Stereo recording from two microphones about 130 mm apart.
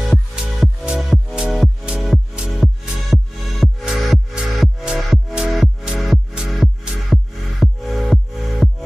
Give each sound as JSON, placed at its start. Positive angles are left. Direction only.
{"t": 0.1, "sound": "music", "side_deg": -5}